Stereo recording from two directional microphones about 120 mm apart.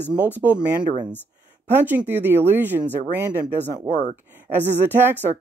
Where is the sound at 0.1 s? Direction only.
15° right (ahead or behind).